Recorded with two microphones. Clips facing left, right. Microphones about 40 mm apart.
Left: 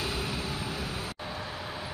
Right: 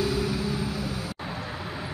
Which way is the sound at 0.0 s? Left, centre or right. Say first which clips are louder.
Right 7 dB; left.